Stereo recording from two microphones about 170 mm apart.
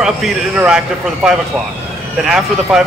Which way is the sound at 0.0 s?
5° right (ahead or behind).